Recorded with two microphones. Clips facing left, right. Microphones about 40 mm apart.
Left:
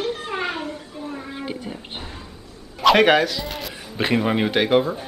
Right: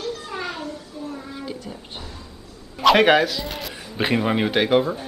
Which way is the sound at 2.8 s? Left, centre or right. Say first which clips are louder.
Even; centre.